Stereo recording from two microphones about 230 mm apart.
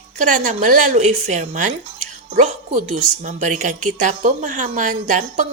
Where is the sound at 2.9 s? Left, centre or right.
Right.